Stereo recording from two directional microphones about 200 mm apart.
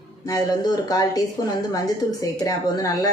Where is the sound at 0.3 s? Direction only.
20° left (ahead or behind).